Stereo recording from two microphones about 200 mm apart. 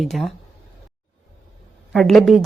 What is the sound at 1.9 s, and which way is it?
Speech, centre (ahead or behind).